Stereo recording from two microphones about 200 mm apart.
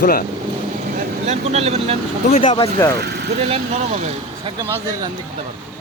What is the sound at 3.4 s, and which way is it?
Speech, 30° right (ahead or behind).